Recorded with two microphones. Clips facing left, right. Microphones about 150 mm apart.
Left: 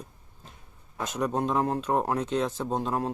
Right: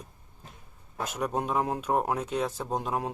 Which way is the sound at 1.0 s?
10° right (ahead or behind).